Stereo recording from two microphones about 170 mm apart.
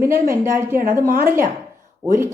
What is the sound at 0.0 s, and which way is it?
Speech, 15° right (ahead or behind).